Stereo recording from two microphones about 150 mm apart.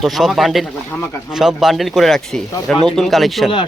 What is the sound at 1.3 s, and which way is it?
Speech, 5° right (ahead or behind).